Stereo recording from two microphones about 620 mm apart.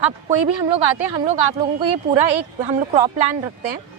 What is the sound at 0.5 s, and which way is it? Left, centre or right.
Speech, right.